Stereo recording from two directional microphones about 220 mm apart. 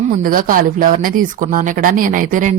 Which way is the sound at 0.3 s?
40° right (ahead or behind).